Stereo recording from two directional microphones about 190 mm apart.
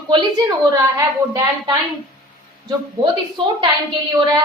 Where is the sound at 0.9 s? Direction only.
20° right (ahead or behind).